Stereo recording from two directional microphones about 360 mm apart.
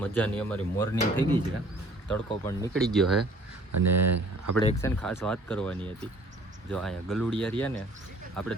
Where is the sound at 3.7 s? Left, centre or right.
Right.